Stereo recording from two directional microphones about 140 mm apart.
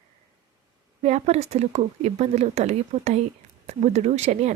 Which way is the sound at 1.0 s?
55° right (ahead or behind).